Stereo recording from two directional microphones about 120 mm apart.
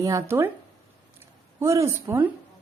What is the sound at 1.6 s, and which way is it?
Speech, 25° right (ahead or behind).